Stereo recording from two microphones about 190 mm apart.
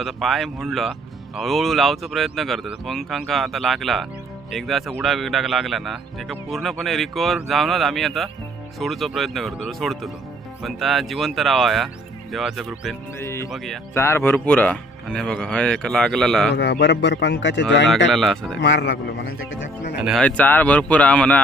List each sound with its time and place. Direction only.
0.0 s speech: centre (ahead or behind)
13.2 s a man's voice: 15° left (ahead or behind)
16.5 s speech: 60° left (ahead or behind)
18.1 s speech: centre (ahead or behind)
18.6 s a man's voice: 65° left (ahead or behind)
20.0 s a man's voice: centre (ahead or behind)